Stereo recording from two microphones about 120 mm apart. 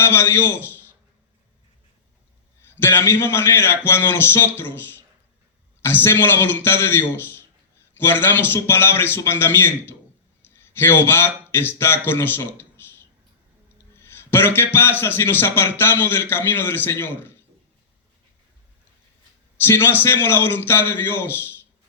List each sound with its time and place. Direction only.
0.0 s a man's voice: 20° left (ahead or behind)
2.7 s a man's voice: 20° left (ahead or behind)
13.9 s a man's voice: 20° left (ahead or behind)
19.6 s a man's voice: 20° left (ahead or behind)